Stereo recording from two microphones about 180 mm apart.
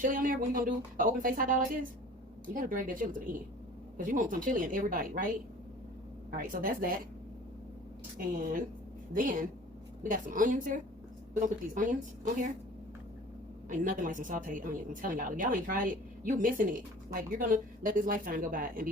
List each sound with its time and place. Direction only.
0.0 s speech: 50° right (ahead or behind)
6.3 s speech: 50° right (ahead or behind)
9.1 s speech: 50° right (ahead or behind)
13.7 s speech: 50° right (ahead or behind)